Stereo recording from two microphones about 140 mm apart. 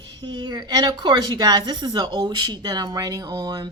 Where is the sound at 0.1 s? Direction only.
30° right (ahead or behind).